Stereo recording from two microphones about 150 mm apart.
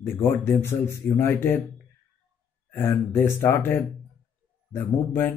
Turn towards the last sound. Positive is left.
turn(degrees=15)  # may be behind; listen again after turning